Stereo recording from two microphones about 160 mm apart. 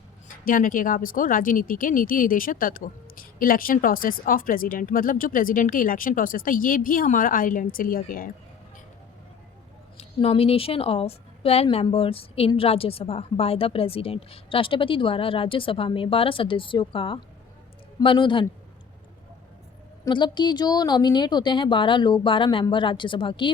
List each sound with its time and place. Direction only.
0.4 s speech: 60° left (ahead or behind)
10.0 s a woman's voice: 40° left (ahead or behind)
20.1 s speech: 30° left (ahead or behind)